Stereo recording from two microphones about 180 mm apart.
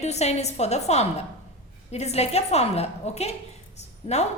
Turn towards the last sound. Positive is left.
turn(degrees=35)  # may be behind; listen again after turning